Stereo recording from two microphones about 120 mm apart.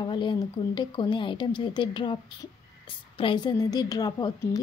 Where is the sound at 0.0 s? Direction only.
40° left (ahead or behind).